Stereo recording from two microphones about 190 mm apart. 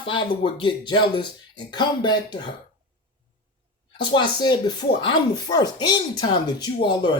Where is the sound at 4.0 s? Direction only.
25° left (ahead or behind).